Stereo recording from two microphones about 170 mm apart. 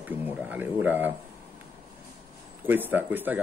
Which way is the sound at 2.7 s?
10° right (ahead or behind).